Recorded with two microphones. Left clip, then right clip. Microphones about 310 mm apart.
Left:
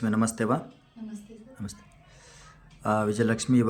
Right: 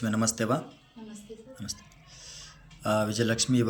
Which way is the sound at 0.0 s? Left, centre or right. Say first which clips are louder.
Left 1 dB; centre.